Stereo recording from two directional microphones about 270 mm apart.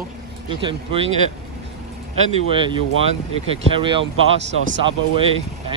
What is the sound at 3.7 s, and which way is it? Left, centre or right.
Speech, centre.